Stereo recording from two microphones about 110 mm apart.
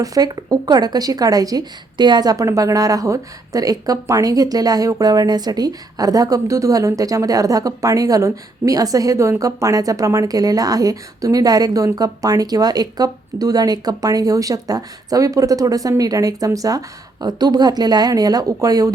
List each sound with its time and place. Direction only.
0.0 s a woman's voice: 35° right (ahead or behind)